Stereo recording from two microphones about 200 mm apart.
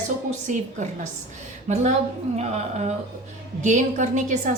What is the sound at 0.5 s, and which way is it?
A woman's voice, 40° right (ahead or behind).